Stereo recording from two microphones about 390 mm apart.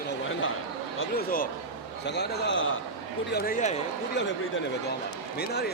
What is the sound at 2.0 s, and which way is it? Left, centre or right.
Speech, left.